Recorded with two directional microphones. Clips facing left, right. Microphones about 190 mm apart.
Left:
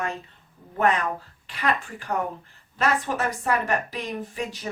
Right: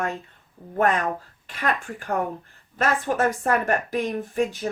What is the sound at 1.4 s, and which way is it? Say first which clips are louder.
A woman's voice: even; 45° right (ahead or behind).